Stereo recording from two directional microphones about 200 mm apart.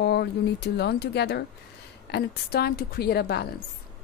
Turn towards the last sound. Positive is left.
turn(degrees=50)  # may be behind; listen again after turning